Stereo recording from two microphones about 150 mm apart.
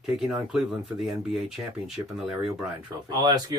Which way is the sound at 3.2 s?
25° right (ahead or behind).